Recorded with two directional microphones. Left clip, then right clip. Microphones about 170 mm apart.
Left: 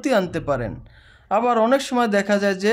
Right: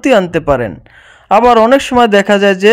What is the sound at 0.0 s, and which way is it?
A man's voice, 40° right (ahead or behind).